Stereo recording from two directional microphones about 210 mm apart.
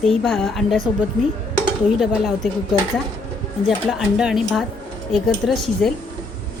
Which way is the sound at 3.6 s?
Centre (ahead or behind).